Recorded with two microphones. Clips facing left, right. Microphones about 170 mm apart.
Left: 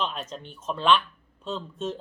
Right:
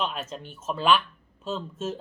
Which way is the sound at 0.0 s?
5° right (ahead or behind).